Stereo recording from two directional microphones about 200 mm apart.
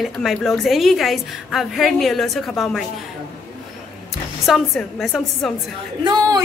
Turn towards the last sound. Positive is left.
turn(degrees=-20)  # may be behind; listen again after turning